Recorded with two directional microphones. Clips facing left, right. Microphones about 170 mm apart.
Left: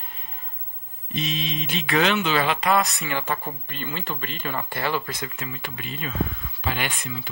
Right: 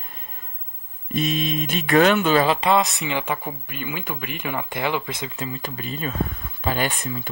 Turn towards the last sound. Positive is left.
turn(degrees=-45)  # may be behind; listen again after turning